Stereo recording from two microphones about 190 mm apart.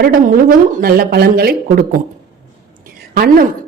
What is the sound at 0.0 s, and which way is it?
A woman's voice, 45° right (ahead or behind).